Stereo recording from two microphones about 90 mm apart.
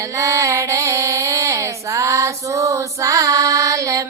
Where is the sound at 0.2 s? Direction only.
35° right (ahead or behind).